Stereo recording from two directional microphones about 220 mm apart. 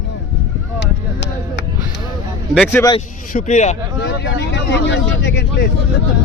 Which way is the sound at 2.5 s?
5° left (ahead or behind).